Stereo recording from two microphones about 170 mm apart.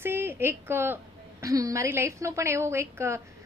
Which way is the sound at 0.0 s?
15° right (ahead or behind).